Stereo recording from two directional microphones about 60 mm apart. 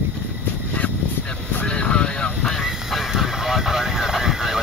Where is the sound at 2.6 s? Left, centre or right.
Centre.